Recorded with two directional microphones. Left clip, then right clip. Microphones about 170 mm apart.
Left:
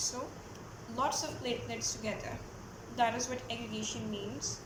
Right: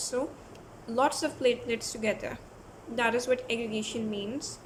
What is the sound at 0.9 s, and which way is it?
A woman's voice, 90° right.